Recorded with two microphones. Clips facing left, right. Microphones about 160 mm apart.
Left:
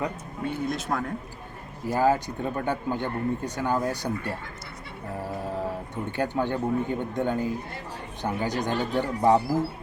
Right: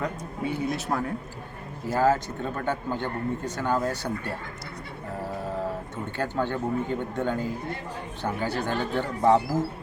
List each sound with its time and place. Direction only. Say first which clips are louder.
0.4 s speech: right 1 dB; 10° right (ahead or behind)
1.9 s speech: even; 15° left (ahead or behind)
6.1 s speech: left 2 dB; 15° left (ahead or behind)